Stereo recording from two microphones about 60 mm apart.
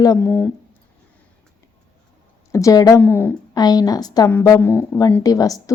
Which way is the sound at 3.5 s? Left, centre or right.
Left.